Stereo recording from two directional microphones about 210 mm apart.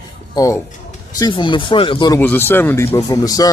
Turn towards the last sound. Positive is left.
turn(degrees=15)  # may be behind; listen again after turning